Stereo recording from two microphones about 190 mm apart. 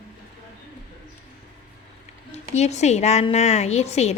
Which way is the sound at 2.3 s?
35° left (ahead or behind).